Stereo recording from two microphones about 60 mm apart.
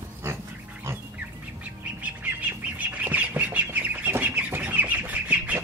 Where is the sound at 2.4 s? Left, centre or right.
Right.